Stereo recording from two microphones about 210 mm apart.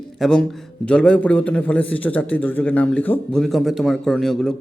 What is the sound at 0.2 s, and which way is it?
A man's voice, 5° left (ahead or behind).